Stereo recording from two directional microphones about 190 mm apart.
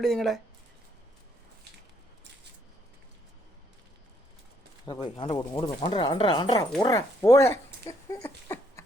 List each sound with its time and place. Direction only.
0.0 s speech: centre (ahead or behind)
4.9 s speech: 25° left (ahead or behind)
8.2 s a sound: 15° left (ahead or behind)